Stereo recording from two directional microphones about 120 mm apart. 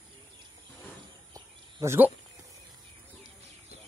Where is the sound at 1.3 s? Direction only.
30° right (ahead or behind).